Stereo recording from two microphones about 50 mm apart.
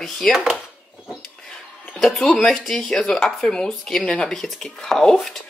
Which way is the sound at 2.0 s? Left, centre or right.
Centre.